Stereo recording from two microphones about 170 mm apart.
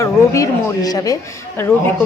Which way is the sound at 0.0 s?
20° left (ahead or behind).